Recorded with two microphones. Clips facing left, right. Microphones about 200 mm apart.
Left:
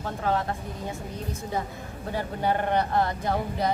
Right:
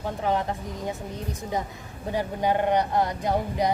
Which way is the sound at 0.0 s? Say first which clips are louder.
Right 1 dB; 15° right (ahead or behind).